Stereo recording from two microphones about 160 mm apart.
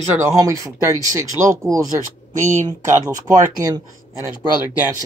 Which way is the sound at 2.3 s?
50° right (ahead or behind).